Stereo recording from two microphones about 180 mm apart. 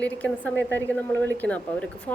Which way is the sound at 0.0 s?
5° left (ahead or behind).